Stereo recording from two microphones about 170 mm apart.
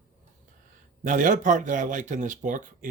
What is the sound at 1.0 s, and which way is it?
Speech, 50° right (ahead or behind).